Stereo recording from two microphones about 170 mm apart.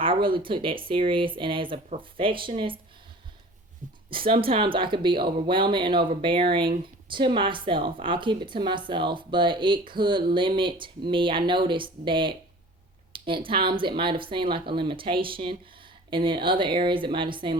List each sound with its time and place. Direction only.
0.0 s speech: 30° right (ahead or behind)
4.1 s a woman's voice: 30° right (ahead or behind)